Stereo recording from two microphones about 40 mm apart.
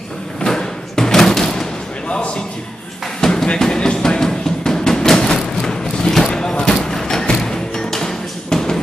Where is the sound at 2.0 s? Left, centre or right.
Left.